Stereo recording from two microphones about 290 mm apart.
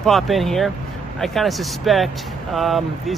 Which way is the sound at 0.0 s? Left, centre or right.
Centre.